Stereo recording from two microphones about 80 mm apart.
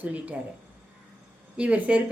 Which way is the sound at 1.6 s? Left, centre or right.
Centre.